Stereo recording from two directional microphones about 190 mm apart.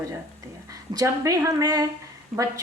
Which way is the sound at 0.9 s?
20° right (ahead or behind).